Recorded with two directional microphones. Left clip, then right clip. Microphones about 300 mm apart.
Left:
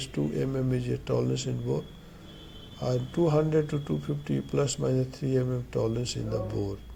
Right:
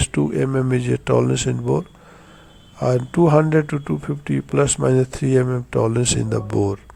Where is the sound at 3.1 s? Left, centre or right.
Right.